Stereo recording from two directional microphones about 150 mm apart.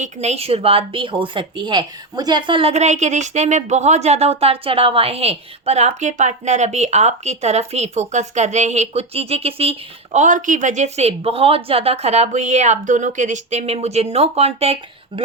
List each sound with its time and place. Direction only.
0.0 s speech: 50° right (ahead or behind)